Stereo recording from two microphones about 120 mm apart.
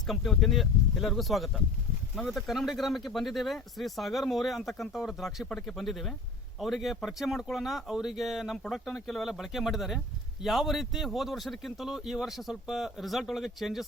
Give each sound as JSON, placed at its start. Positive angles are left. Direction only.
{"t": 0.1, "sound": "speech", "side_deg": 0}